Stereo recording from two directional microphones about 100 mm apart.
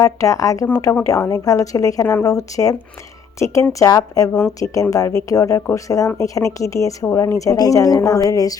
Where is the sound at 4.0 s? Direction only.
35° left (ahead or behind).